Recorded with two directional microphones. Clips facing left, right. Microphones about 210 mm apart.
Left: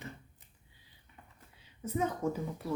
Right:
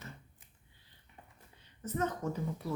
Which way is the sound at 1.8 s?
10° left (ahead or behind).